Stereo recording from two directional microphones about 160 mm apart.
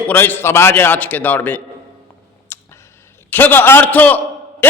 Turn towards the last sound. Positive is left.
turn(degrees=10)  # may be behind; listen again after turning